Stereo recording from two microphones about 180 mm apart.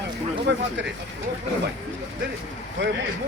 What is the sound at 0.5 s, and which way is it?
Speech, 80° right.